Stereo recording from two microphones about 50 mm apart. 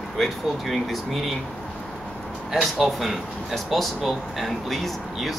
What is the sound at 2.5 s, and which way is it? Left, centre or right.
Speech, centre.